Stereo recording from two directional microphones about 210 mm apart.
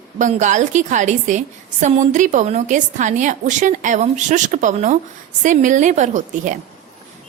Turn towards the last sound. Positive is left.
turn(degrees=-35)  # may be behind; listen again after turning